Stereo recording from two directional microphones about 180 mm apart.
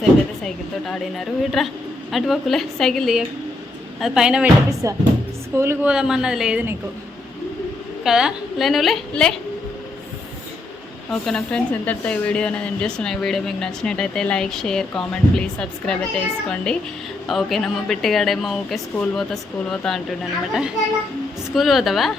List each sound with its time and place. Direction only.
0.4 s speech: centre (ahead or behind)
4.8 s speech: 15° right (ahead or behind)
8.0 s speech: 5° right (ahead or behind)
11.1 s speech: 5° left (ahead or behind)